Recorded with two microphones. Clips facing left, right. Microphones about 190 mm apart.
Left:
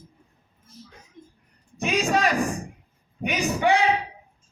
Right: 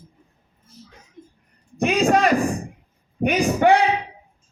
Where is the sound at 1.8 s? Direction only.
55° right (ahead or behind).